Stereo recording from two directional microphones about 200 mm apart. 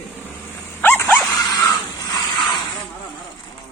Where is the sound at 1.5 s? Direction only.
20° left (ahead or behind).